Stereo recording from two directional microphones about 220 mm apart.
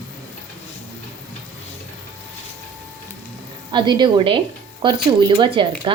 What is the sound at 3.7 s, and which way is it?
Speech, 20° right (ahead or behind).